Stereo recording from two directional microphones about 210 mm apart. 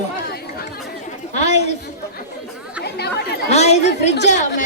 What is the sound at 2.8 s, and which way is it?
Chatter, 50° left (ahead or behind).